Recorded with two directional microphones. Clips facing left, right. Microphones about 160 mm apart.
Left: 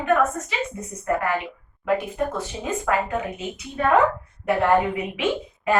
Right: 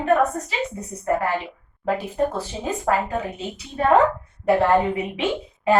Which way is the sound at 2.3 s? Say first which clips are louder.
Right 1 dB; 35° right (ahead or behind).